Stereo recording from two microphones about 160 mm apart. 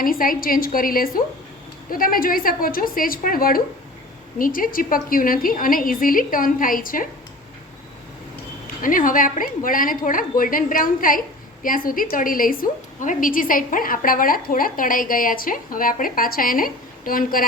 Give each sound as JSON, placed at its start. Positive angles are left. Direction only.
{"t": 0.0, "sound": "a woman's voice", "side_deg": 60}
{"t": 8.8, "sound": "a woman's voice", "side_deg": 60}